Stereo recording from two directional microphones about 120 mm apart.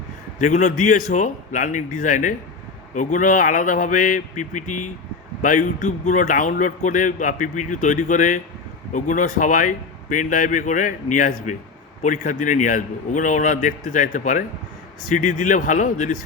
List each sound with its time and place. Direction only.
0.3 s speech: 90° left